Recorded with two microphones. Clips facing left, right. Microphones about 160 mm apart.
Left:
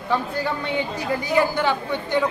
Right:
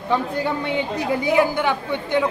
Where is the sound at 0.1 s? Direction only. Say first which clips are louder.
Right 2 dB; 20° right (ahead or behind).